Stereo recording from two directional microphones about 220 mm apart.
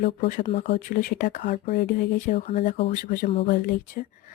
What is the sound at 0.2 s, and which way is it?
Speech, 35° left (ahead or behind).